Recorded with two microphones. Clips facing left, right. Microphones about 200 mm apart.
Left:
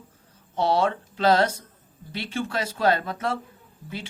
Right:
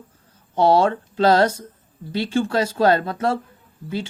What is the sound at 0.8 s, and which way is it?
Speech, 30° right (ahead or behind).